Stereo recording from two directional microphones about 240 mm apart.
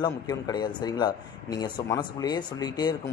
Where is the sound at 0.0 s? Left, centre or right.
Centre.